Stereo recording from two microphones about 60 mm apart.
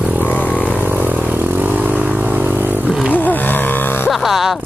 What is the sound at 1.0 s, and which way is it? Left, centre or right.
Vehicle, right.